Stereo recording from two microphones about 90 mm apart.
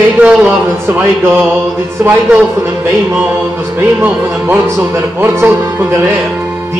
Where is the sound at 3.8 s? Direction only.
25° right (ahead or behind).